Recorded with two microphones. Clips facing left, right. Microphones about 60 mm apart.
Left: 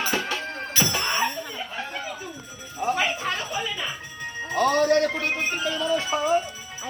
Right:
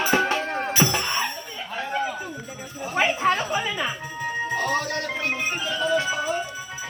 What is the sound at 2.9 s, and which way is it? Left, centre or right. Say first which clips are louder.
Music: right 8 dB; right.